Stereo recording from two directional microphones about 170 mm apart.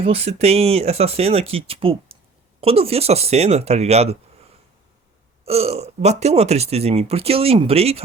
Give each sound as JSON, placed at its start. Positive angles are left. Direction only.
{"t": 0.0, "sound": "speech", "side_deg": -35}
{"t": 5.5, "sound": "speech", "side_deg": -35}